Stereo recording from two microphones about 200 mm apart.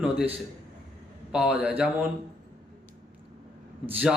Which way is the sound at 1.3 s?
5° right (ahead or behind).